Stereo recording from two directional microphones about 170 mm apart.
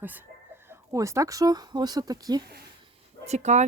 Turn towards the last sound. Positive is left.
turn(degrees=-40)  # may be behind; listen again after turning